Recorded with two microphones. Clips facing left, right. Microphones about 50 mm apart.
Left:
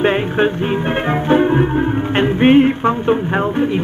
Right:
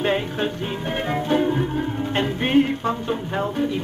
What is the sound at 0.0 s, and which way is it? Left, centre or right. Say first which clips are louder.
Music: left 8 dB; left.